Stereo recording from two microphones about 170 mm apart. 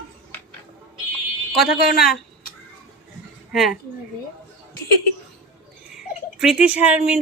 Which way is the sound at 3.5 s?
Centre (ahead or behind).